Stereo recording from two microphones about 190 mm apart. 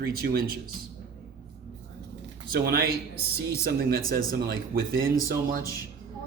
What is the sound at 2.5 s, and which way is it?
Music, 50° right (ahead or behind).